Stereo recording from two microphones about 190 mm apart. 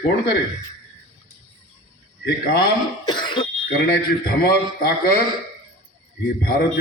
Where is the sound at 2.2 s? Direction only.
60° left (ahead or behind).